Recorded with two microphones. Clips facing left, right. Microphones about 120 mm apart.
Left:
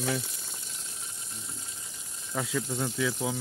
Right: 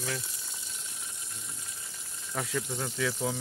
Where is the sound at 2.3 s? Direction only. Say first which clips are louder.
Left 2 dB; 5° left (ahead or behind).